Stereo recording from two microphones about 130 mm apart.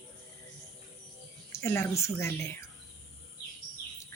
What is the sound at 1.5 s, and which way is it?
Speech, 20° left (ahead or behind).